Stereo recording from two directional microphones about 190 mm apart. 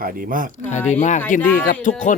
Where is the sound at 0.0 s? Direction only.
50° right (ahead or behind).